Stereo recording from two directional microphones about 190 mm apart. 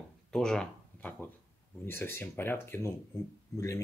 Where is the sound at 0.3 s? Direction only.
5° left (ahead or behind).